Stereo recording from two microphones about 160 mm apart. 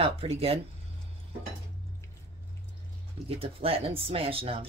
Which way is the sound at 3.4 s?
35° right (ahead or behind).